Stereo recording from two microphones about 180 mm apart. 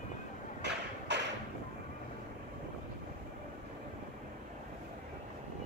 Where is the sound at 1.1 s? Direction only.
75° right (ahead or behind).